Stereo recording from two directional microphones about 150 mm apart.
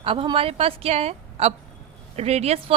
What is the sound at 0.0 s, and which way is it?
A woman's voice, 35° right (ahead or behind).